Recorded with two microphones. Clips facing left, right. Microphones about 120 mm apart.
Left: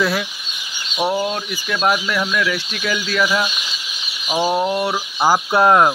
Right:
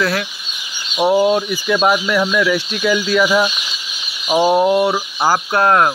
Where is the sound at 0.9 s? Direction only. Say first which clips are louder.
Right 7 dB; 20° right (ahead or behind).